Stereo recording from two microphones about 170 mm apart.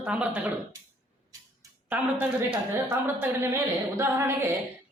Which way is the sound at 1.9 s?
5° right (ahead or behind).